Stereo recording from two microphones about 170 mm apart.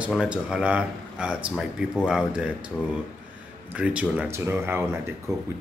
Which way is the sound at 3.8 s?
5° right (ahead or behind).